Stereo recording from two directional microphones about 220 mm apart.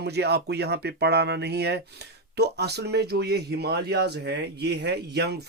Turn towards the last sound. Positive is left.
turn(degrees=-50)  # may be behind; listen again after turning